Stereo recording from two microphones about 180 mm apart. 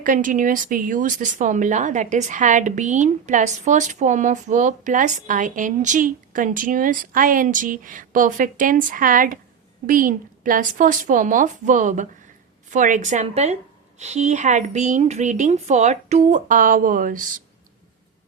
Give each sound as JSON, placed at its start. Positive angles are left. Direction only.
{"t": 0.0, "sound": "speech", "side_deg": -45}